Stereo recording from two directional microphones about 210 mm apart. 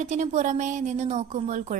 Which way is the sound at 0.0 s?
35° right (ahead or behind).